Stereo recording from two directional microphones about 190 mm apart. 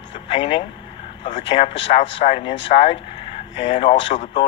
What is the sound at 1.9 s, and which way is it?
Speech, 35° left (ahead or behind).